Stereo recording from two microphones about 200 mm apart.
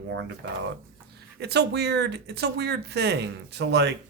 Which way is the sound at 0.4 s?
60° right (ahead or behind).